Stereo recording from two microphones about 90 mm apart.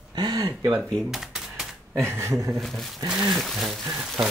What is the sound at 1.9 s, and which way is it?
Speech, 30° right (ahead or behind).